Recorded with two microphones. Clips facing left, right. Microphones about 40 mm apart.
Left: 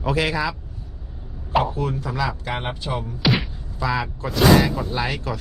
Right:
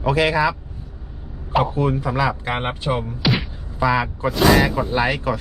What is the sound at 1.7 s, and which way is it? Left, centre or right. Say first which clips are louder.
Speech: right 5 dB; right.